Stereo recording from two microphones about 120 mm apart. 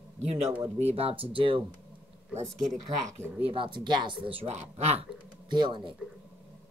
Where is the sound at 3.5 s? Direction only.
45° right (ahead or behind); by 5.1 s 65° right (ahead or behind).